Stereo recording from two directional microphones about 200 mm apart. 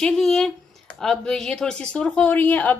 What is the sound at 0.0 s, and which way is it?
Speech, centre (ahead or behind).